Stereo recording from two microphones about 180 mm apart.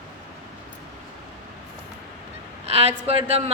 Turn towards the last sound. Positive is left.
turn(degrees=-35)  # may be behind; listen again after turning